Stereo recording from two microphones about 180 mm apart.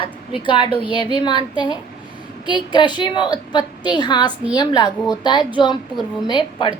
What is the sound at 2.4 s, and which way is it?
A woman's voice, 25° left (ahead or behind).